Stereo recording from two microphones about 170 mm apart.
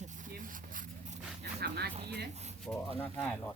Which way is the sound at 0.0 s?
50° right (ahead or behind).